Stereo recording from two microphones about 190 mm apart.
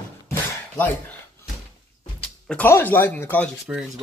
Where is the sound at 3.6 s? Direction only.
5° right (ahead or behind).